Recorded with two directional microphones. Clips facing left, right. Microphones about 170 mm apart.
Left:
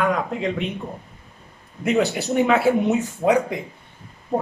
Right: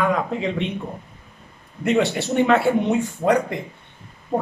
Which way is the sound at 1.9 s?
Centre (ahead or behind).